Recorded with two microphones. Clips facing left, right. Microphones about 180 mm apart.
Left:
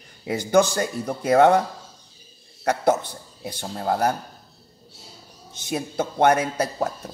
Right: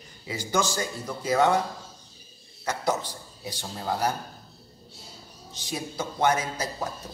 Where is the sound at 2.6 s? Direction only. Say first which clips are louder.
Left 7 dB; 55° left (ahead or behind).